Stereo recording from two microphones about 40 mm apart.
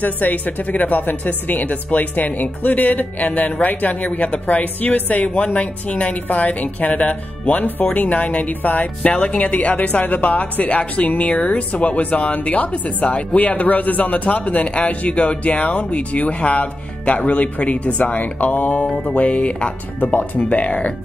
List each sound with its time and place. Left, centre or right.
0.0 s a woman's voice: left